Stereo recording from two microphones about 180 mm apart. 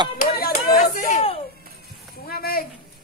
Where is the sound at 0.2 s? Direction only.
55° left (ahead or behind).